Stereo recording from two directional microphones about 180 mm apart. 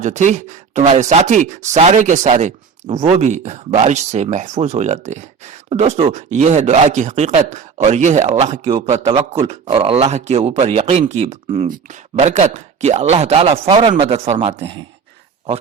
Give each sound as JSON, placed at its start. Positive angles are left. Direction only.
{"t": 0.0, "sound": "speech", "side_deg": -40}
{"t": 8.7, "sound": "a man's voice", "side_deg": -25}
{"t": 9.4, "sound": "speech", "side_deg": -30}